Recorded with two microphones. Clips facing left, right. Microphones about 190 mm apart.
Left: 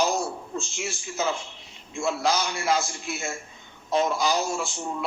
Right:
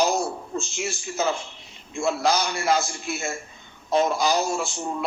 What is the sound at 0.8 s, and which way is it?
A man's voice, 40° right (ahead or behind).